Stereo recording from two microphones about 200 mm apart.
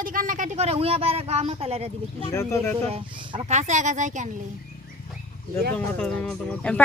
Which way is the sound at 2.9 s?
25° right (ahead or behind).